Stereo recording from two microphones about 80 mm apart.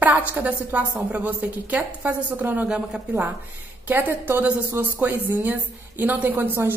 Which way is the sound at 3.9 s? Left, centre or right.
Right.